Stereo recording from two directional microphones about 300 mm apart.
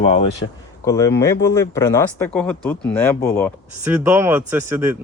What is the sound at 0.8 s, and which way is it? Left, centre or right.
Speech, centre.